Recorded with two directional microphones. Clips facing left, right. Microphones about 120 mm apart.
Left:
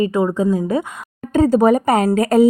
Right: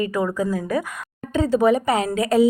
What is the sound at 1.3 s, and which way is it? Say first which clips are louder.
Speech: left 5 dB; 45° left (ahead or behind).